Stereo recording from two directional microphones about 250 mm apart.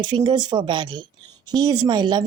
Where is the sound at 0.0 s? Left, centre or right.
Centre.